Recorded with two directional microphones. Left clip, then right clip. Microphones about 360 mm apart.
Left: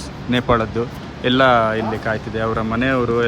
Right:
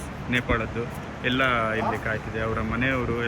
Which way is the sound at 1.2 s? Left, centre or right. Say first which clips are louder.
Left 9 dB; centre.